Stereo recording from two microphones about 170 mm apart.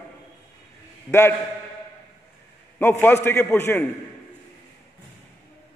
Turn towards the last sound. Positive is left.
turn(degrees=10)  # may be behind; listen again after turning